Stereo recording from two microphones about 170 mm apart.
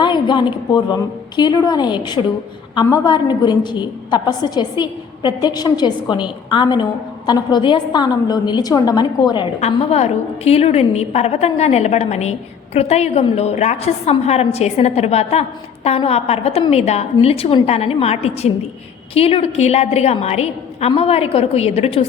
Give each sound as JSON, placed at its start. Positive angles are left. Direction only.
{"t": 0.0, "sound": "a woman's voice", "side_deg": 25}
{"t": 9.6, "sound": "a woman's voice", "side_deg": 40}